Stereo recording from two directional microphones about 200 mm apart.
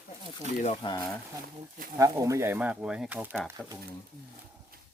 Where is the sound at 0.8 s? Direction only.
25° left (ahead or behind).